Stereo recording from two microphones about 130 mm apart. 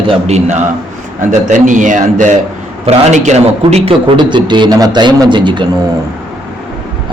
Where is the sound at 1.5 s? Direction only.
75° right (ahead or behind).